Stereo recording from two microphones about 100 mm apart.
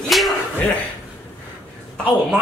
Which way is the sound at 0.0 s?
Centre (ahead or behind).